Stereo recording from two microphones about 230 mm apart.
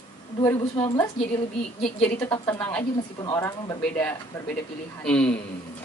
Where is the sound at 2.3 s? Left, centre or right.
Centre.